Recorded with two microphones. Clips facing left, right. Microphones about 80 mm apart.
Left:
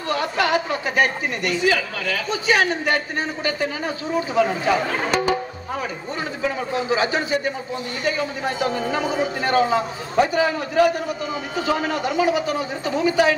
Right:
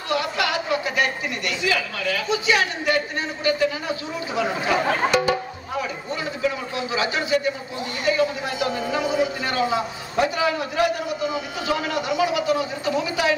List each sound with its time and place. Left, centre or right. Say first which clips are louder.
0.1 s a woman's voice: left 3 dB; left
6.9 s a woman's voice: even; left